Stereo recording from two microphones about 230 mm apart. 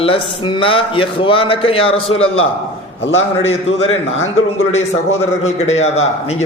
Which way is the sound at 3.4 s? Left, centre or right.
Left.